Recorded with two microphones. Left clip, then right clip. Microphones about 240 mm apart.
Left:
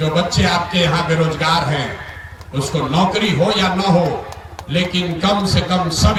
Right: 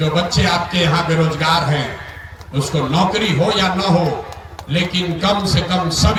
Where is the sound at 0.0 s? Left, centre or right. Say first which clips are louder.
Even; right.